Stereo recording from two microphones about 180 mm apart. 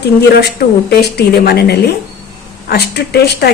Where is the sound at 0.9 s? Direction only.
65° left (ahead or behind).